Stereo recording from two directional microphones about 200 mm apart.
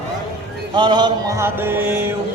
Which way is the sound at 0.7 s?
20° right (ahead or behind).